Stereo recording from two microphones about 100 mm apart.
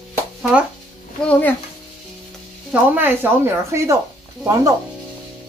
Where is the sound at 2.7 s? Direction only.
20° right (ahead or behind).